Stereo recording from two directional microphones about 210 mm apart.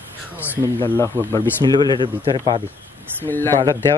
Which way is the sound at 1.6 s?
20° right (ahead or behind).